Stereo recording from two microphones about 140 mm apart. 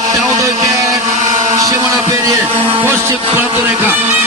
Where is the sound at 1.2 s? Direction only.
25° right (ahead or behind).